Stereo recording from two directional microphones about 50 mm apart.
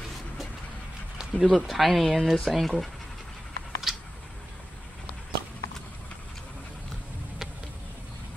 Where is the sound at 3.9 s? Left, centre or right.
Centre.